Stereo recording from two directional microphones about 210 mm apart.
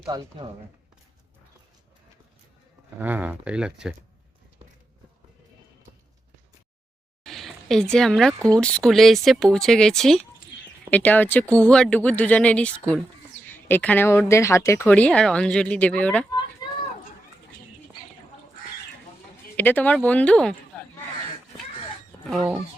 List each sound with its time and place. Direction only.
0.0 s speech: 20° right (ahead or behind)
3.0 s speech: 10° right (ahead or behind)
7.3 s speech: centre (ahead or behind)
16.6 s a sound: 20° left (ahead or behind)
19.5 s speech: 10° left (ahead or behind)
22.3 s speech: centre (ahead or behind)